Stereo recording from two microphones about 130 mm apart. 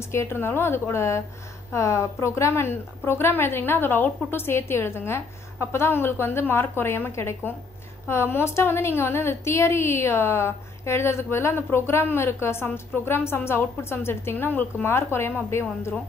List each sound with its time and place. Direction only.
0.1 s a woman's voice: 20° left (ahead or behind)